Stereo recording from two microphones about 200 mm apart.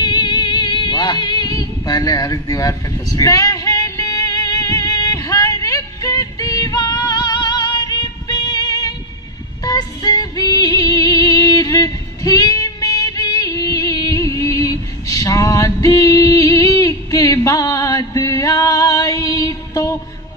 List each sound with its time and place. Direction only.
0.0 s music: 20° left (ahead or behind)